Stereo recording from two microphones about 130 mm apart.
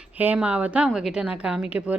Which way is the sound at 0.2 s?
10° right (ahead or behind).